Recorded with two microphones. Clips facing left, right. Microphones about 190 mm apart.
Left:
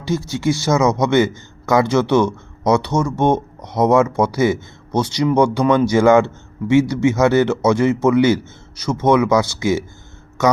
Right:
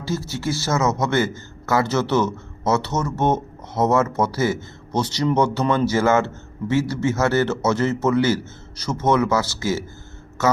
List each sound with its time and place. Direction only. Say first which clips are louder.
0.3 s speech: left 9 dB; 15° left (ahead or behind)